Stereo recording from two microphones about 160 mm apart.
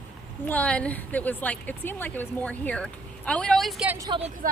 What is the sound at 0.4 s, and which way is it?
A woman's voice, 10° left (ahead or behind).